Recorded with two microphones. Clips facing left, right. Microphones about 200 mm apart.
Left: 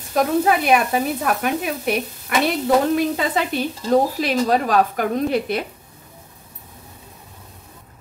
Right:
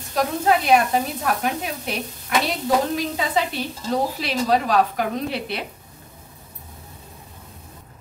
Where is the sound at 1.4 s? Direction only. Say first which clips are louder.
Left 4 dB; 60° left (ahead or behind).